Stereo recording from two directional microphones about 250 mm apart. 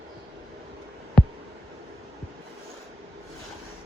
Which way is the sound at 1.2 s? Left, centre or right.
Centre.